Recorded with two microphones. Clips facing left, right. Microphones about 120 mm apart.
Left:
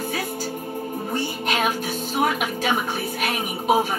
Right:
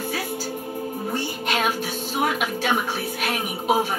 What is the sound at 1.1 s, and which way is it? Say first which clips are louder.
Music: left 2 dB; centre (ahead or behind).